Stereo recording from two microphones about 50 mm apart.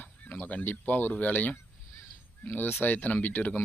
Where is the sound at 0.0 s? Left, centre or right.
Left.